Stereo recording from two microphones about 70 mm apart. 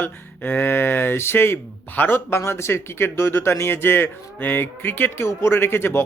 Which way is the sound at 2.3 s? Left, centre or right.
Left.